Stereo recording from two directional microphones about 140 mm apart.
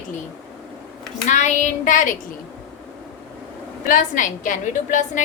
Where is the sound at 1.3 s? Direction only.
60° left (ahead or behind).